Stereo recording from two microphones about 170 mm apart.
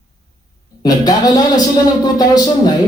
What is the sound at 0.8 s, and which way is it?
A man's voice, 20° left (ahead or behind).